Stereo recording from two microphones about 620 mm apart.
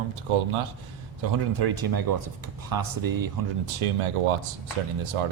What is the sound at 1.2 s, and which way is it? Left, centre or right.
Speech, right.